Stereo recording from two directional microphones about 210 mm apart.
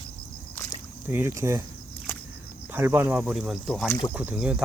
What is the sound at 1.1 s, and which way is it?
Speech, 10° right (ahead or behind).